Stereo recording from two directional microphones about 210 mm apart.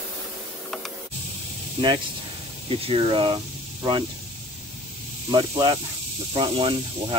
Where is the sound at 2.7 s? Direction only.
25° right (ahead or behind).